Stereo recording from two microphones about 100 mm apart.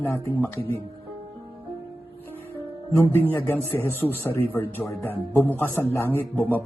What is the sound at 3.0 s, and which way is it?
A man's voice, 20° left (ahead or behind).